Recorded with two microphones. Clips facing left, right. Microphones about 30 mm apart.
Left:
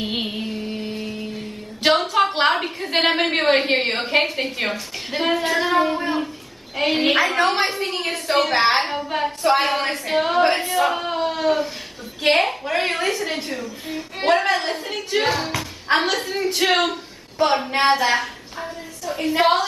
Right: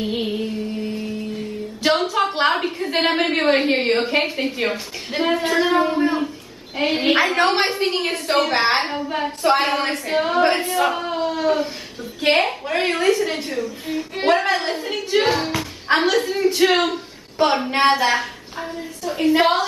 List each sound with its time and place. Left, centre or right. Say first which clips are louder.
0.2 s music: right 3 dB; centre
2.0 s a sound: left 1 dB; centre
2.9 s a woman's voice: left 1 dB; centre
7.3 s a woman's voice: right 1 dB; centre